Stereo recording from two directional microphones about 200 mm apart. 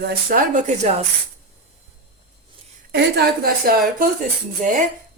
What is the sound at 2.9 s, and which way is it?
Speech, 55° right (ahead or behind).